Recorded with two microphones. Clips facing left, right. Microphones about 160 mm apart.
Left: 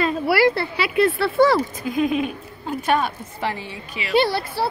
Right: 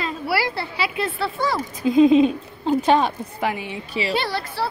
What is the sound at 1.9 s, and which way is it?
A woman's voice, 25° right (ahead or behind).